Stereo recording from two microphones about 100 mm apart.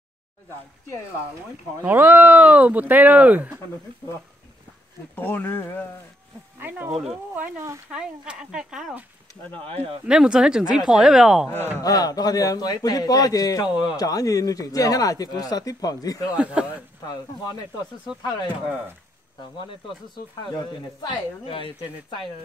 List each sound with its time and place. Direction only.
1.8 s speech: 20° right (ahead or behind)
5.1 s speech: 20° left (ahead or behind)
7.3 s speech: 15° right (ahead or behind)
9.6 s speech: 70° right (ahead or behind)
10.0 s speech: 5° right (ahead or behind)
11.8 s a man's voice: 40° left (ahead or behind)
16.3 s speech: 10° right (ahead or behind)
17.1 s a man's voice: 40° left (ahead or behind)
20.5 s speech: 45° left (ahead or behind)